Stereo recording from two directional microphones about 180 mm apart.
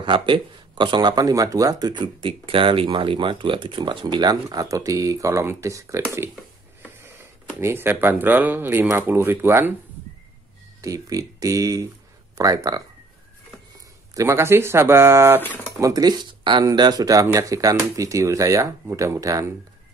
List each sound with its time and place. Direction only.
0.0 s speech: 25° right (ahead or behind)
7.6 s speech: 10° right (ahead or behind)
10.8 s speech: 20° right (ahead or behind)
14.1 s speech: 15° right (ahead or behind)
15.4 s speech: 10° left (ahead or behind)
15.8 s speech: 20° right (ahead or behind)